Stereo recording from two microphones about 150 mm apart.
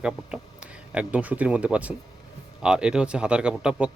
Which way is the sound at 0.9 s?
10° right (ahead or behind).